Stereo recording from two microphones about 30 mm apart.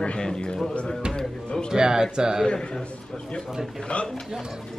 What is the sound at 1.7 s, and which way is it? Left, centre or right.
Speech, right.